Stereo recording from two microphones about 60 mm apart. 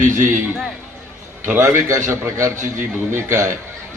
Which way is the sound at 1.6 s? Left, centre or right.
Right.